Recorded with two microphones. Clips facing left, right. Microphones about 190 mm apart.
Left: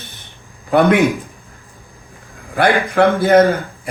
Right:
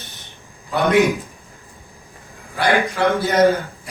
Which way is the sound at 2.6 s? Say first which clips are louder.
Left 5 dB; 55° left (ahead or behind).